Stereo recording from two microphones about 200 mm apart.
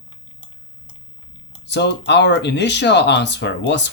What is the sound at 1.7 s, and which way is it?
Speech, 60° left (ahead or behind).